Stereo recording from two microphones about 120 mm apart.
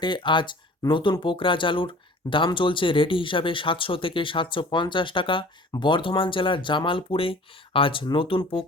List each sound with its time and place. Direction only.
0.0 s speech: 40° left (ahead or behind)